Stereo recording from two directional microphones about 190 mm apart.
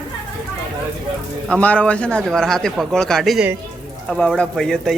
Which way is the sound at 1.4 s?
5° left (ahead or behind).